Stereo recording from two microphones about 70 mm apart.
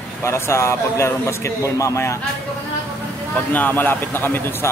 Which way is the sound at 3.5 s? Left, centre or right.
Left.